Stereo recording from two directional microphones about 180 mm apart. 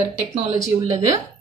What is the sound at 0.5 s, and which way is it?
Speech, 20° right (ahead or behind).